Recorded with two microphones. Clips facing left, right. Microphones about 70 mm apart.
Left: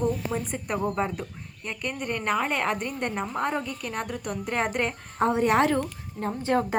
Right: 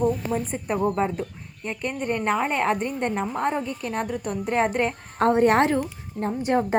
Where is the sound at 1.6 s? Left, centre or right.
Right.